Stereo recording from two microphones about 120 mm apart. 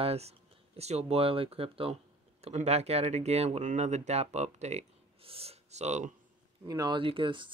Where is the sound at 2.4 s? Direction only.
70° right (ahead or behind).